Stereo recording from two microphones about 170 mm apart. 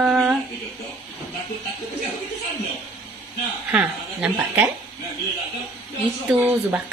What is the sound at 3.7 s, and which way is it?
Speech, 10° right (ahead or behind).